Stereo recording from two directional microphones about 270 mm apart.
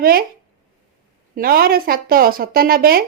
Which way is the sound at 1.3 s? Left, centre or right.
Right.